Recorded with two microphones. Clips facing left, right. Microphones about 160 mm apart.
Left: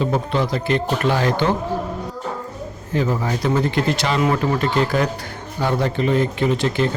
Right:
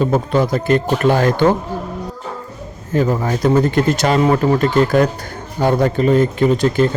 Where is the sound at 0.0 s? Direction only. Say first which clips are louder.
Right 5 dB; 45° right (ahead or behind).